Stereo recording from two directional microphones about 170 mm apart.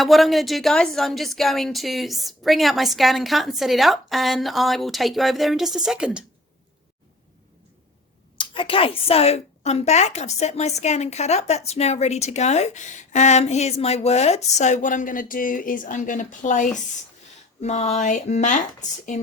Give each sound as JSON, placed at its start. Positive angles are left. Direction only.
{"t": 0.0, "sound": "a woman's voice", "side_deg": 0}
{"t": 8.4, "sound": "a woman's voice", "side_deg": 30}